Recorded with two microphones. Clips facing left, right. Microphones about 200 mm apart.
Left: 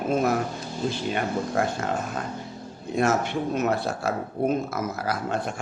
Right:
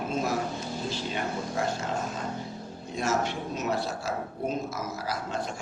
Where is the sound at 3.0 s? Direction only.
55° left (ahead or behind).